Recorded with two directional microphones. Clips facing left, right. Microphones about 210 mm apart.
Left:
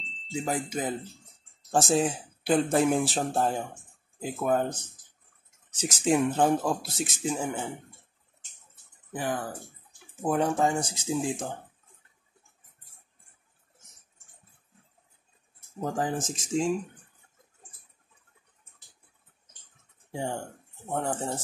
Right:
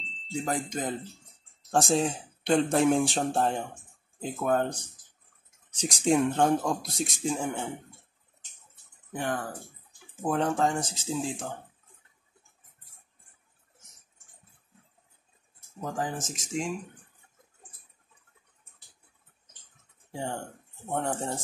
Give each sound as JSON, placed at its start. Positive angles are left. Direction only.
{"t": 0.0, "sound": "speech", "side_deg": 0}
{"t": 5.8, "sound": "speech", "side_deg": 5}
{"t": 9.1, "sound": "speech", "side_deg": 5}
{"t": 15.8, "sound": "speech", "side_deg": 30}
{"t": 20.1, "sound": "speech", "side_deg": 15}
{"t": 20.9, "sound": "speech", "side_deg": 0}